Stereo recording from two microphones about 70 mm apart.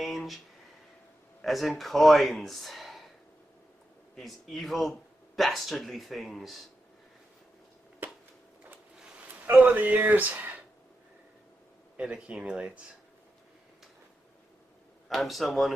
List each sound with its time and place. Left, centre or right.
0.0 s a sound: centre
1.4 s speech: centre
4.1 s speech: centre
8.0 s a sound: right
9.3 s speech: right
11.9 s speech: centre
15.1 s speech: centre